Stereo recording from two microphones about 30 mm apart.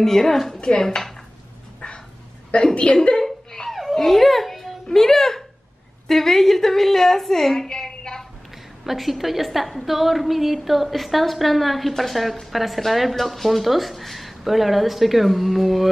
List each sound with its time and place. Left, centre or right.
0.0 s a woman's voice: centre
2.7 s a woman's voice: left
3.2 s a sound: centre
4.8 s a woman's voice: centre
8.8 s speech: centre